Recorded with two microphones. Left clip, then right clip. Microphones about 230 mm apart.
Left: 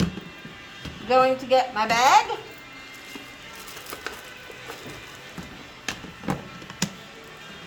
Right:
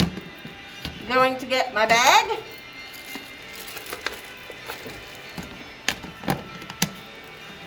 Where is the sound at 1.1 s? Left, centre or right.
Centre.